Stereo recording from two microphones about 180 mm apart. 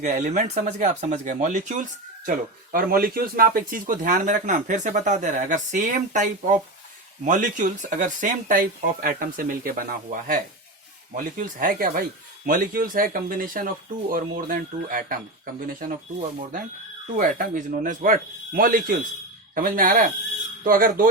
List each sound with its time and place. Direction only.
0.0 s speech: 45° right (ahead or behind)
2.7 s speech: 55° right (ahead or behind)
17.2 s speech: 50° right (ahead or behind)